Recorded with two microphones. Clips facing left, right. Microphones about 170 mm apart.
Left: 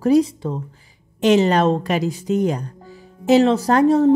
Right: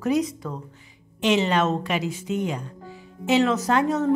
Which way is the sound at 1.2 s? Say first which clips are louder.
Left 6 dB; 40° left (ahead or behind).